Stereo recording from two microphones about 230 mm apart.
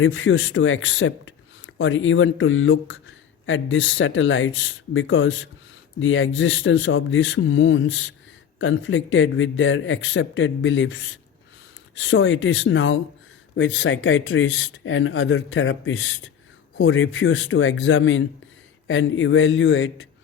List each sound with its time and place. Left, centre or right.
0.0 s speech: left